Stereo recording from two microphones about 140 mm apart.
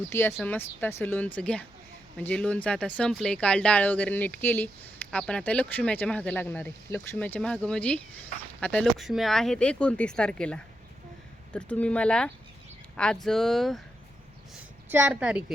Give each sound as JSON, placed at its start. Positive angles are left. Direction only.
{"t": 0.1, "sound": "speech", "side_deg": 20}
{"t": 9.0, "sound": "speech", "side_deg": 0}
{"t": 14.8, "sound": "a woman's voice", "side_deg": -10}